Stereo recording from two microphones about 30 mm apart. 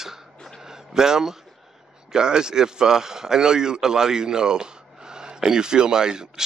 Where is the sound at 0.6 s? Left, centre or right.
Centre.